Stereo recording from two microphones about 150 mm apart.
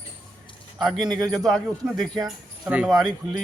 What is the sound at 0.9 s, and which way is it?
Speech, 30° right (ahead or behind).